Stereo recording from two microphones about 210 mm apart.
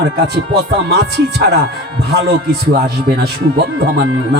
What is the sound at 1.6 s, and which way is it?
Speech, 50° right (ahead or behind).